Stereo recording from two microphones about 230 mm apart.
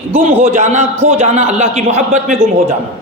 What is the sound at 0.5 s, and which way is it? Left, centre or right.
A man's voice, right.